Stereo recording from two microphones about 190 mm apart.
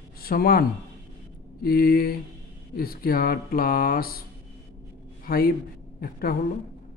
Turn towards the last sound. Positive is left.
turn(degrees=50)  # may be behind; listen again after turning